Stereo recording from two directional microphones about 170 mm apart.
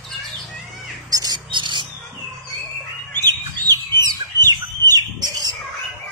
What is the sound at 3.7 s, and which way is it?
Bird, 25° right (ahead or behind).